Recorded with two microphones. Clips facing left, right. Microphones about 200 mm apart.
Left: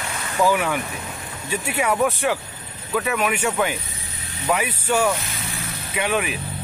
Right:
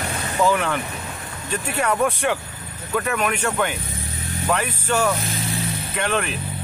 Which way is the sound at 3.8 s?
50° right (ahead or behind).